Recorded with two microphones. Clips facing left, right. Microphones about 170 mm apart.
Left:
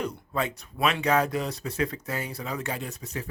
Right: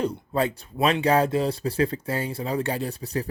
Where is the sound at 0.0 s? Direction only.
30° right (ahead or behind).